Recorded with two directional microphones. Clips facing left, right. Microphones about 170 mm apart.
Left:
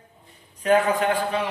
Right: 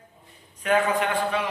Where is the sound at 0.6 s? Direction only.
35° left (ahead or behind).